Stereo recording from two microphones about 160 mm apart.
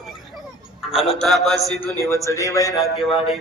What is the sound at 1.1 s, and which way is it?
Speech, centre (ahead or behind).